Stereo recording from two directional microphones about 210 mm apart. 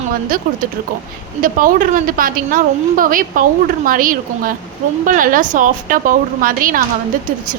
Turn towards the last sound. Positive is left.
turn(degrees=-40)  # may be behind; listen again after turning